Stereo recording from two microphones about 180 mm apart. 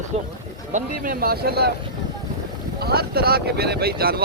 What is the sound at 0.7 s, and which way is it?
Speech, 50° right (ahead or behind).